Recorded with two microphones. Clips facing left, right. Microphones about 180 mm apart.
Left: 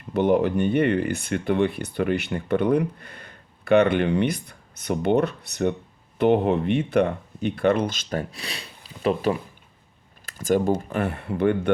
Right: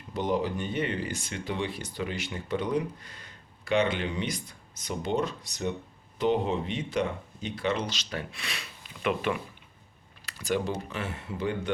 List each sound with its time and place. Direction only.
0.1 s speech: 60° left (ahead or behind); by 9.4 s 35° left (ahead or behind)
10.2 s speech: 45° left (ahead or behind)